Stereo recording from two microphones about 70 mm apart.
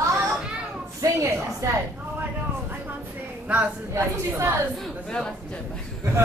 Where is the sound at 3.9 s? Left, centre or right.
Right.